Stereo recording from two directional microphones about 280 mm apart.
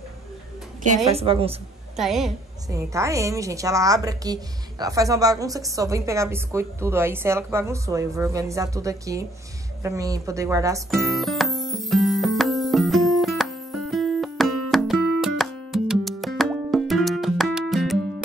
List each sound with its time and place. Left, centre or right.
0.8 s a woman's voice: right
2.0 s a woman's voice: centre
10.9 s music: centre